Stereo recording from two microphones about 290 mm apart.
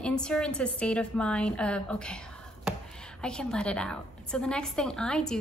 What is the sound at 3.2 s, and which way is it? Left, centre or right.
A woman's voice, centre.